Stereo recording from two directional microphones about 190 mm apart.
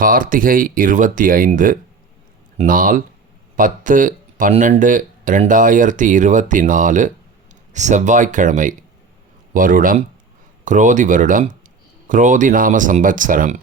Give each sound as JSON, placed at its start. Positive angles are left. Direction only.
{"t": 0.0, "sound": "speech", "side_deg": -45}